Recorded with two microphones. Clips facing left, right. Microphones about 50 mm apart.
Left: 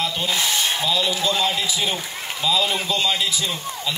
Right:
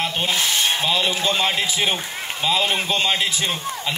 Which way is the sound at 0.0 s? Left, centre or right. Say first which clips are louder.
Right 1 dB; right.